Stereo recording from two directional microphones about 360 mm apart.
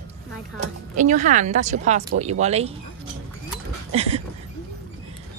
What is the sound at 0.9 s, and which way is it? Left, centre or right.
Speech, right.